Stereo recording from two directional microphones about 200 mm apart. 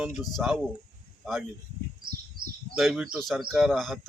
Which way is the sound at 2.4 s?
45° right (ahead or behind).